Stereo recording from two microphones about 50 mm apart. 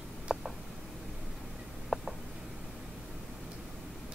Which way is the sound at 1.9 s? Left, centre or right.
Centre.